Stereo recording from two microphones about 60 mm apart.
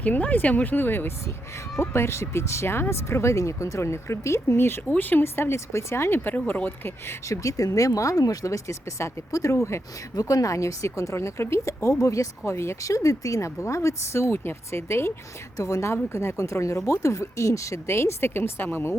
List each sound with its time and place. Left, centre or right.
0.0 s speech: left
4.9 s speech: left
5.4 s speech: left
6.1 s speech: left
7.3 s speech: left
10.2 s speech: left
12.0 s speech: left
12.5 s speech: left
15.5 s a woman's voice: left
16.0 s speech: left